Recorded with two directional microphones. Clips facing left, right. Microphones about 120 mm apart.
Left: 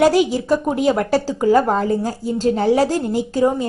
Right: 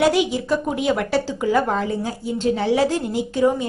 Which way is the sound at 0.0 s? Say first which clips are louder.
Left 3 dB; 40° left (ahead or behind).